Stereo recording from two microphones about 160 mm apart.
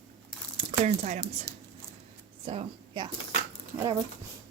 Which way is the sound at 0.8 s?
45° right (ahead or behind).